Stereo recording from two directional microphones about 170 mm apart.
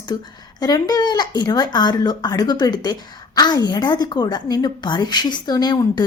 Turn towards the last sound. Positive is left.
turn(degrees=25)  # may be behind; listen again after turning